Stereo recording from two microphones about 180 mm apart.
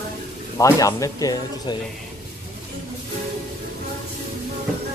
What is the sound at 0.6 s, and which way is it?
Speech, 20° left (ahead or behind).